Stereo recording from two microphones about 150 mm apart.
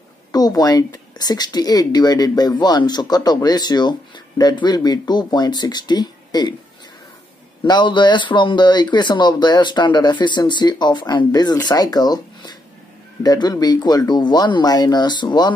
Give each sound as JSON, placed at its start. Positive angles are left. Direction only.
{"t": 0.3, "sound": "speech", "side_deg": 25}
{"t": 7.6, "sound": "speech", "side_deg": 30}